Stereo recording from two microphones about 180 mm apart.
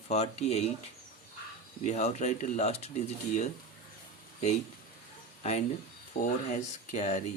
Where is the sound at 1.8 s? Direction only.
40° left (ahead or behind).